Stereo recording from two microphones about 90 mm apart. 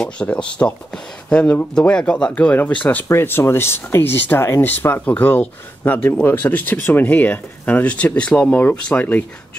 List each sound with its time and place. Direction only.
0.0 s speech: 10° left (ahead or behind)